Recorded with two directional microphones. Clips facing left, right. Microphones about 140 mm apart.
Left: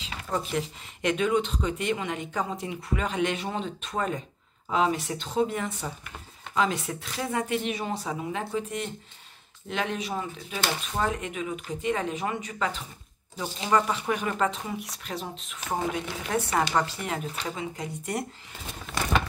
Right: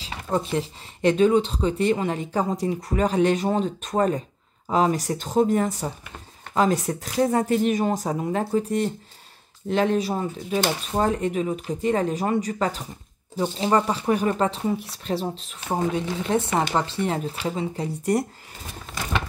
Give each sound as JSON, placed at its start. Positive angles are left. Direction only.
{"t": 0.0, "sound": "speech", "side_deg": -30}